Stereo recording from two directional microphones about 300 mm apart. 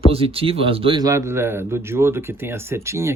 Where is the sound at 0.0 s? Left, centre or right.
Centre.